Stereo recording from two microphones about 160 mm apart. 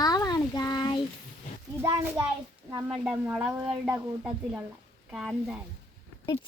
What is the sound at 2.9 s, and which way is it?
Speech, 5° right (ahead or behind).